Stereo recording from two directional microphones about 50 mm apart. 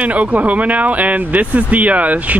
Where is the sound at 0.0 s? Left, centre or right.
Right.